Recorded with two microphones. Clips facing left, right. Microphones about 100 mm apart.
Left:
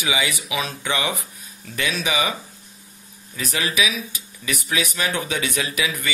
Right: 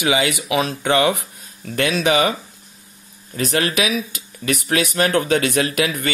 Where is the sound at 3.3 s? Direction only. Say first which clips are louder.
Right 4 dB; 55° right (ahead or behind).